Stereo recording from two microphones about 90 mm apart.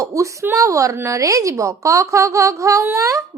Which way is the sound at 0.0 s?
35° right (ahead or behind).